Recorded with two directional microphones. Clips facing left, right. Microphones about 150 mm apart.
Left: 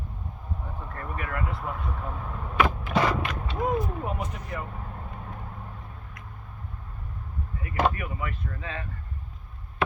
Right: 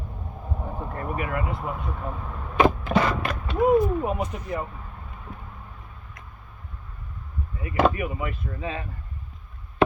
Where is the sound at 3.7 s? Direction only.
20° right (ahead or behind).